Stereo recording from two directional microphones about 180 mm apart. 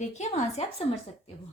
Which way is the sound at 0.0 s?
40° left (ahead or behind).